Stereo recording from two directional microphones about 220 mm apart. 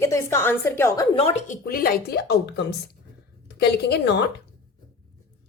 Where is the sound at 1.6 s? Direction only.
40° left (ahead or behind).